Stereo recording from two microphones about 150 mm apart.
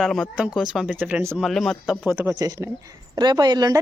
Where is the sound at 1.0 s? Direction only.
10° right (ahead or behind).